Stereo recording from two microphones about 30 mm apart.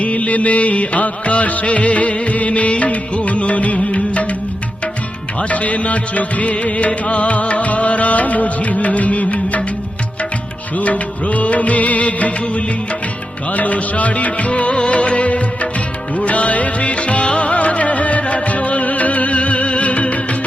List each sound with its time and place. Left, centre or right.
0.0 s music: left
5.4 s music: left
10.8 s music of bollywood: left
13.5 s music: left